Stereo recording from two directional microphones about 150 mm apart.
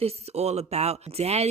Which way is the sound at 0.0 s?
45° right (ahead or behind).